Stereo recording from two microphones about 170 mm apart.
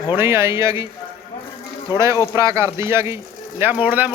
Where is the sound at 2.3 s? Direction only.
15° right (ahead or behind).